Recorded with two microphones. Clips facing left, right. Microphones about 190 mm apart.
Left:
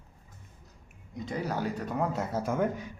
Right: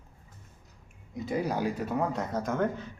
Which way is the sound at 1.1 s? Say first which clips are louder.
Right 3 dB; 10° right (ahead or behind).